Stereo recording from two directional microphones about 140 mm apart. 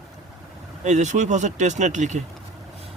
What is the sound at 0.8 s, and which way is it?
A man's voice, 60° right (ahead or behind).